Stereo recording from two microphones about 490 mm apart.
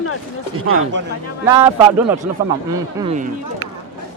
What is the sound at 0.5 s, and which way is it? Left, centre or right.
Speech, right.